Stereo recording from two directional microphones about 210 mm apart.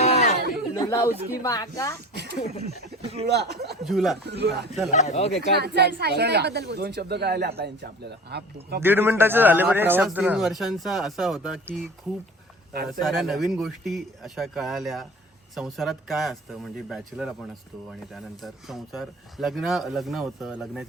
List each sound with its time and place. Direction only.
0.0 s chatter: 30° left (ahead or behind)
0.7 s a sound: 15° left (ahead or behind)
1.4 s speech: 15° left (ahead or behind)
2.1 s speech: 50° right (ahead or behind)
3.0 s speech: 30° right (ahead or behind)
3.2 s speech: 50° right (ahead or behind)
3.8 s speech: centre (ahead or behind)
4.3 s speech: 50° right (ahead or behind)
4.9 s speech: 35° left (ahead or behind)
5.4 s speech: 50° right (ahead or behind)
8.8 s a man's voice: 10° right (ahead or behind)
13.0 s speech: centre (ahead or behind)